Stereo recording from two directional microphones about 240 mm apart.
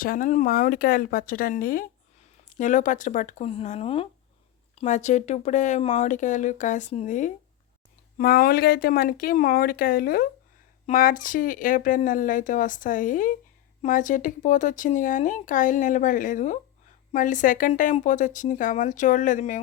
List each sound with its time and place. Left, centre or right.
0.0 s speech: left